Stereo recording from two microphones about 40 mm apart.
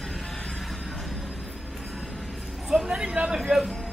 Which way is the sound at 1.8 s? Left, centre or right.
Centre.